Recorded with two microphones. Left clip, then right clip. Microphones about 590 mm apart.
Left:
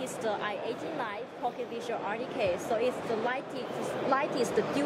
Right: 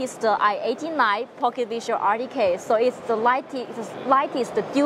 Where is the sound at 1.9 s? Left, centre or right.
Right.